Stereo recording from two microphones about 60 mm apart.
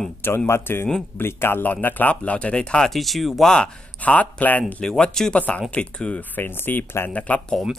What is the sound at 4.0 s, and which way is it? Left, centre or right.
Speech, left.